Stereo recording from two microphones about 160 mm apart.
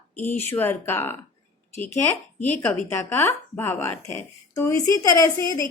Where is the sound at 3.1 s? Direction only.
15° left (ahead or behind).